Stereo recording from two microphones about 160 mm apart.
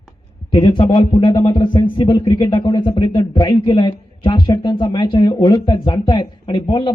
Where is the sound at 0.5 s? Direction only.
30° left (ahead or behind).